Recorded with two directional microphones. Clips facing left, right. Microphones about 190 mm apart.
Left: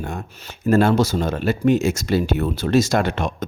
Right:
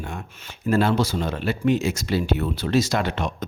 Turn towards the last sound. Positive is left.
turn(degrees=50)  # may be behind; listen again after turning